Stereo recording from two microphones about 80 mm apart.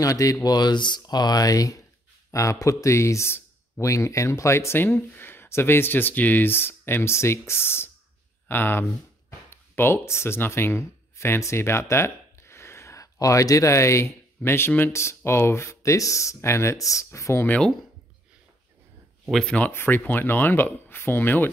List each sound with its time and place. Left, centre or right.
0.0 s speech: left
19.5 s speech: left